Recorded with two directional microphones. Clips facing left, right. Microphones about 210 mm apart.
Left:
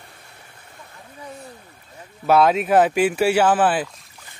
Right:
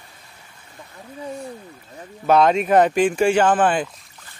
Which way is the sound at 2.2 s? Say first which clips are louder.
Even; 5° left (ahead or behind).